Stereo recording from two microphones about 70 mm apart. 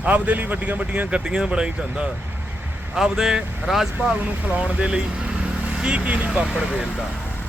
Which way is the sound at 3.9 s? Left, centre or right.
Centre.